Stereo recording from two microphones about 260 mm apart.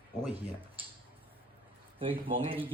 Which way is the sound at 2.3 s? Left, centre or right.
Centre.